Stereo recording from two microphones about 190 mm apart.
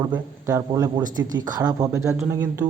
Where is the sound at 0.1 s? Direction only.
15° right (ahead or behind).